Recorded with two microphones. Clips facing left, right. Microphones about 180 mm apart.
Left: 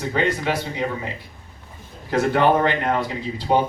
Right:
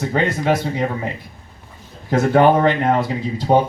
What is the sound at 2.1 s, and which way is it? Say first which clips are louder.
Speech: right 4 dB; 45° right (ahead or behind).